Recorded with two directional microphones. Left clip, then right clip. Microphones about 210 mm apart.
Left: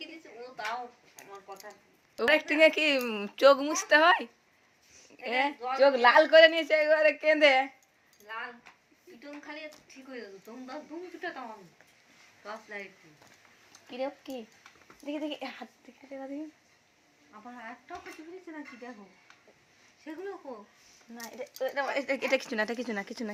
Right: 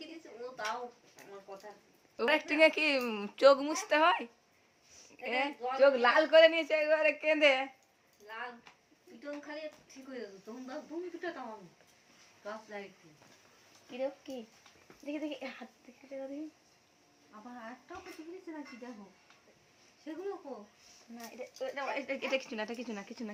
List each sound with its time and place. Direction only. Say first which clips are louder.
2.1 s a man's voice: left 4 dB; 15° left (ahead or behind)
13.9 s speech: left 2 dB; 20° left (ahead or behind)
20.1 s speech: left 1 dB; 15° right (ahead or behind)
21.3 s speech: left 7 dB; 30° left (ahead or behind)